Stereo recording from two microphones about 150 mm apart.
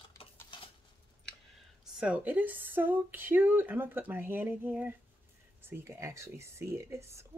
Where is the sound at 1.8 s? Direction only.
5° right (ahead or behind).